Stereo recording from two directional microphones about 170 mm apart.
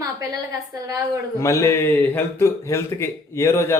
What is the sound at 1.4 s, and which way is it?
A man's voice, 20° left (ahead or behind).